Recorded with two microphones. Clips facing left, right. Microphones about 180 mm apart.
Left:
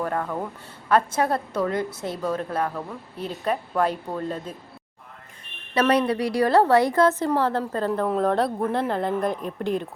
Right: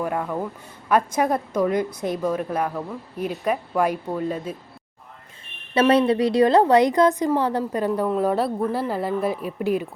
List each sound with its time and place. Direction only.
0.0 s a woman's voice: 10° right (ahead or behind)
5.9 s a woman's voice: 25° right (ahead or behind); by 9.8 s 5° right (ahead or behind)